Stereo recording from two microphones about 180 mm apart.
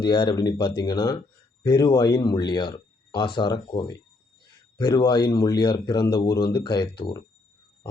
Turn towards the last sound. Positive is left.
turn(degrees=25)  # may be behind; listen again after turning